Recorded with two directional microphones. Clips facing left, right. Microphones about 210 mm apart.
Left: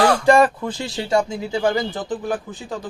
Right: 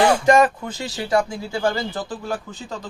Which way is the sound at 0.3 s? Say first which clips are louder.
Left 1 dB; 30° left (ahead or behind).